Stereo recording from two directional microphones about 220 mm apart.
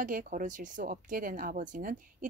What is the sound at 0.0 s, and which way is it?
Speech, 35° right (ahead or behind).